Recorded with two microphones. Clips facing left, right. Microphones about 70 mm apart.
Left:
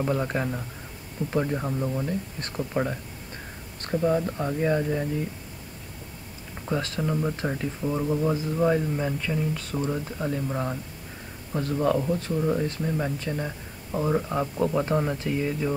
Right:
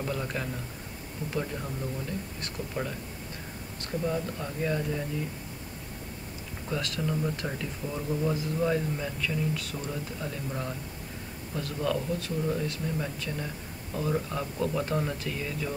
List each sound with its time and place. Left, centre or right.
0.0 s speech: left
6.7 s speech: left